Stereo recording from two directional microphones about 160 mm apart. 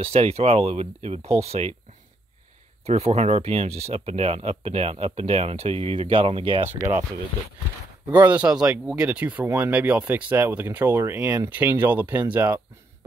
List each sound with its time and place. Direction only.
0.0 s speech: 40° right (ahead or behind)
2.9 s speech: 40° right (ahead or behind)
8.2 s speech: 10° right (ahead or behind)